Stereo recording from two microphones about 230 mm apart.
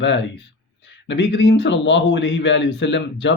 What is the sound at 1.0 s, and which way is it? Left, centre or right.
A man's voice, left.